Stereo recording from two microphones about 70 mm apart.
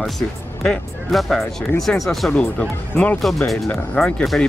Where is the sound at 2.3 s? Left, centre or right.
Centre.